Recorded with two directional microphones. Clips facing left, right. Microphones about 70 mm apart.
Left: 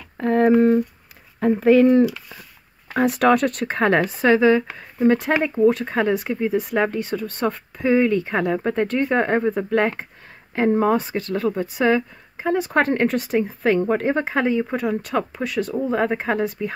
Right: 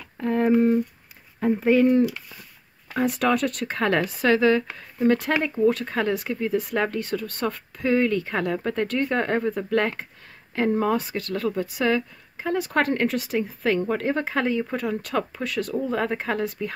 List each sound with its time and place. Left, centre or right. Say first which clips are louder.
0.2 s speech: left 4 dB; left
2.9 s speech: left 5 dB; left; by 16.7 s centre